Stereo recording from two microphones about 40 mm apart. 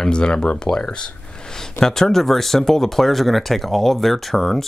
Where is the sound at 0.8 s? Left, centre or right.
Left.